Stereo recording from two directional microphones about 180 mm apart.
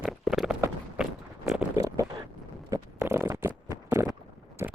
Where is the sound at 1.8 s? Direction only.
20° right (ahead or behind).